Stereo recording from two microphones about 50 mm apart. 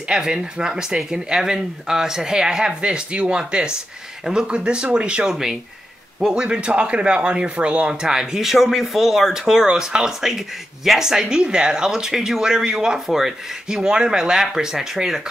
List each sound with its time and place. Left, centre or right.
0.1 s speech: centre
5.3 s speech: centre